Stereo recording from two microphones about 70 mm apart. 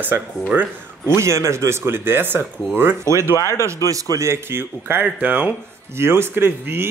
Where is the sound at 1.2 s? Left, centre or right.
Right.